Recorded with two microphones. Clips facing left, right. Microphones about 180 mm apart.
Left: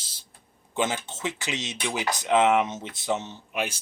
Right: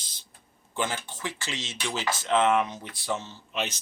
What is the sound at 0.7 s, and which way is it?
A man's voice, 20° left (ahead or behind).